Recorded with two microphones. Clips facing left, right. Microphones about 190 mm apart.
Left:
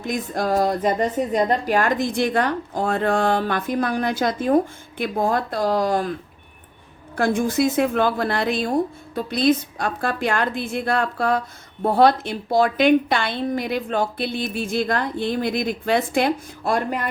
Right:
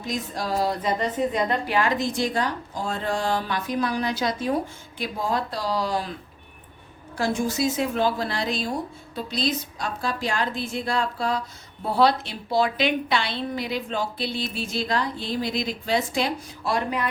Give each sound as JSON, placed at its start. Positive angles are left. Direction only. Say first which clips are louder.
{"t": 0.0, "sound": "a woman's voice", "louder": "left 5 dB", "side_deg": 55}
{"t": 7.2, "sound": "a woman's voice", "louder": "left 5 dB", "side_deg": 55}